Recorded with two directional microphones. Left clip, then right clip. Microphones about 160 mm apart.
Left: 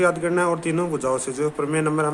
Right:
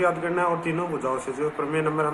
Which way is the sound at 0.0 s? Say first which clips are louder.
Left 3 dB; 90° left.